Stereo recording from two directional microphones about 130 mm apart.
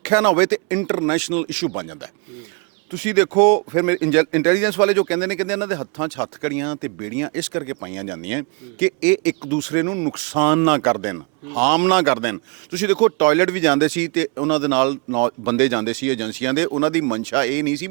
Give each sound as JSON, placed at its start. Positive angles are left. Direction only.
{"t": 0.0, "sound": "speech", "side_deg": -20}